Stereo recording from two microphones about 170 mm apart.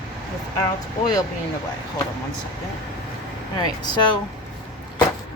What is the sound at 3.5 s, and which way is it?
Speech, 25° left (ahead or behind).